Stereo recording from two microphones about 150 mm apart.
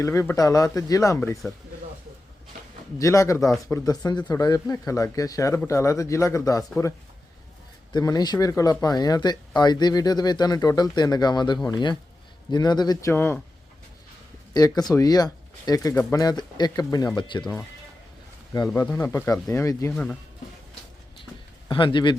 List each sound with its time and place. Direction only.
0.0 s speech: 20° left (ahead or behind)
3.0 s speech: 20° left (ahead or behind)
7.9 s speech: 25° left (ahead or behind)
14.5 s speech: 25° left (ahead or behind)
18.7 s speech: 15° left (ahead or behind)
19.9 s speech: 5° left (ahead or behind)
21.7 s speech: 35° left (ahead or behind)